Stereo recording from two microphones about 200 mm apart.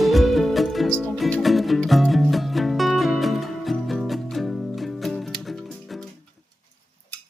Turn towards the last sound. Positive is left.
turn(degrees=0)  # may be behind; listen again after turning